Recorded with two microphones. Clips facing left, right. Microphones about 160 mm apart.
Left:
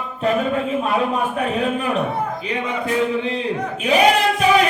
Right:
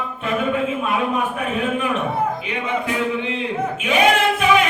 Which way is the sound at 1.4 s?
35° left (ahead or behind).